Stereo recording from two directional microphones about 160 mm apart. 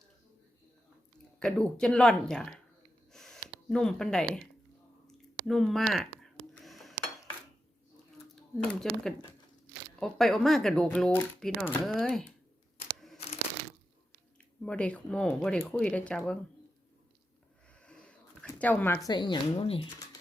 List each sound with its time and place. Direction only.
1.4 s speech: 5° left (ahead or behind)
3.1 s gasp: 5° left (ahead or behind)
5.0 s a sound: centre (ahead or behind)
8.5 s speech: 5° left (ahead or behind)
14.6 s speech: 5° left (ahead or behind)
17.8 s a sound: 5° left (ahead or behind)
19.0 s speech: 30° left (ahead or behind)